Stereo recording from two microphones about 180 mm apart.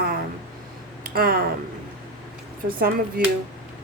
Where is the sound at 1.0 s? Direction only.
55° right (ahead or behind).